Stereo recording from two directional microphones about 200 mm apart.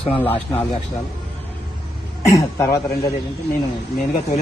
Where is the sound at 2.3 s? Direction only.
15° left (ahead or behind).